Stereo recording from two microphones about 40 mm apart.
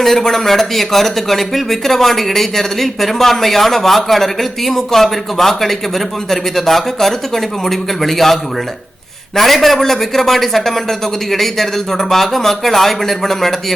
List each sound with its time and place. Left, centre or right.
0.0 s speech: centre